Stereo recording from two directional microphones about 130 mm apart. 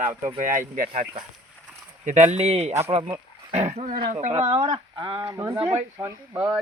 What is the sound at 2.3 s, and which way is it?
Speech, 55° right (ahead or behind).